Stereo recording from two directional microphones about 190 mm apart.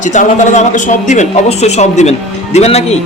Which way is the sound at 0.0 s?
40° left (ahead or behind).